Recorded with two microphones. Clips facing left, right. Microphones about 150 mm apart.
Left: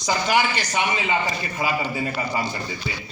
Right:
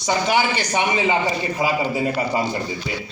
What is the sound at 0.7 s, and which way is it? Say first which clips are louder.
Speech: right 4 dB; 30° right (ahead or behind).